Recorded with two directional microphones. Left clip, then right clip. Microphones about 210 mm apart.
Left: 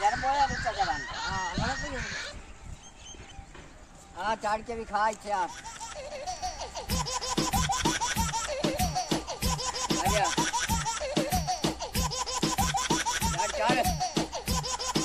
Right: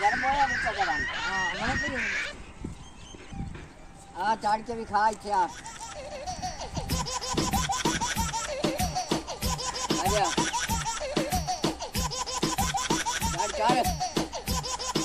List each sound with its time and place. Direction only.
0.0 s chicken: centre (ahead or behind)
4.2 s speech: 10° left (ahead or behind)
5.9 s music: centre (ahead or behind)